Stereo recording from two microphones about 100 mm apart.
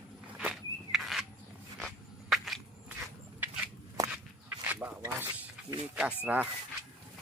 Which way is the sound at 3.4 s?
20° right (ahead or behind).